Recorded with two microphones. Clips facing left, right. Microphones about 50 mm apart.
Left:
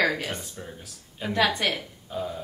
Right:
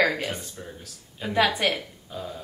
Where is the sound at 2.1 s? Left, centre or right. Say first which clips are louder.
Left 5 dB; centre.